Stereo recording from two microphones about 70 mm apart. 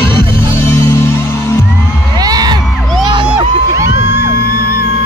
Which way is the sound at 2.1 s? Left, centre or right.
Right.